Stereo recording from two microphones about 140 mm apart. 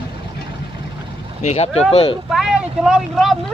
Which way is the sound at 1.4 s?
55° left (ahead or behind).